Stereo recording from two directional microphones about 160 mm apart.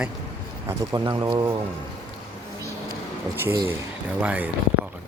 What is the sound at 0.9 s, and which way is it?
Speech, 25° right (ahead or behind).